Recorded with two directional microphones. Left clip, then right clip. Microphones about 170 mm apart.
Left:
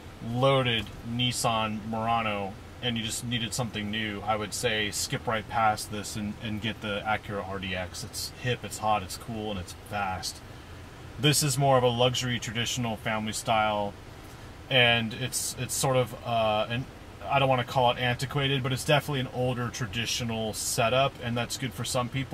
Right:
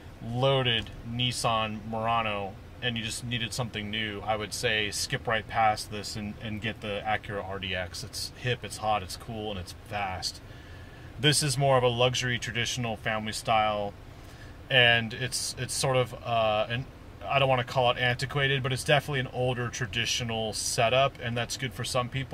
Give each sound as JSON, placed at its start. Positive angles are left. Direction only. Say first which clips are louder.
{"t": 0.4, "sound": "speech", "louder": "left 1 dB", "side_deg": -5}
{"t": 11.1, "sound": "speech", "louder": "even", "side_deg": -10}